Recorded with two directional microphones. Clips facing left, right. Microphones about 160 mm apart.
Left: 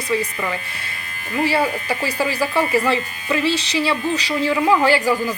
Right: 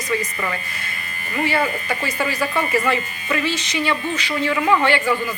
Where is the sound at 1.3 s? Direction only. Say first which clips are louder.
Left 2 dB; 30° left (ahead or behind).